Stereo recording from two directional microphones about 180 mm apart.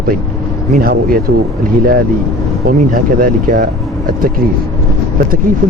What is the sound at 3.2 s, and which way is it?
Speech, 50° right (ahead or behind).